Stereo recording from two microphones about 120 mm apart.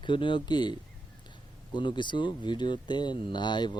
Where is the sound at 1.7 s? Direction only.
40° left (ahead or behind).